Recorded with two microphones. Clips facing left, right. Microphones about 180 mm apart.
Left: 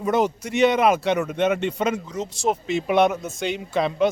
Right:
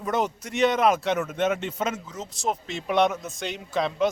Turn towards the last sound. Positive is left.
turn(degrees=0)  # may be behind; listen again after turning